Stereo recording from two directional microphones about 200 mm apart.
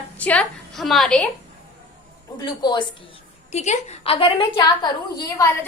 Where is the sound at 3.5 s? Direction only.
35° left (ahead or behind).